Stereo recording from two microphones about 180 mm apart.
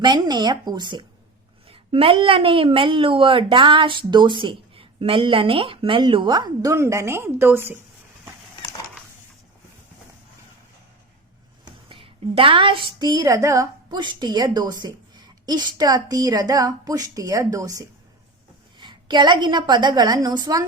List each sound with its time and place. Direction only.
0.0 s a woman's voice: 25° right (ahead or behind)
11.9 s a woman's voice: 30° right (ahead or behind)